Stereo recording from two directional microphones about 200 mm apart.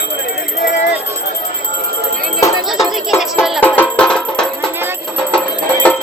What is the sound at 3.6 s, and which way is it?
Music, 10° left (ahead or behind).